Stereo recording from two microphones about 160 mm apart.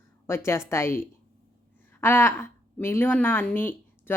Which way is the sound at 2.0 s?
15° left (ahead or behind).